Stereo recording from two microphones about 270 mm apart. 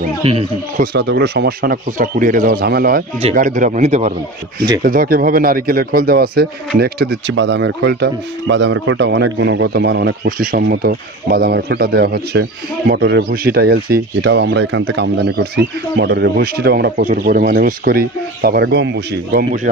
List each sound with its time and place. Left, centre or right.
0.2 s speech: right
0.9 s speech: right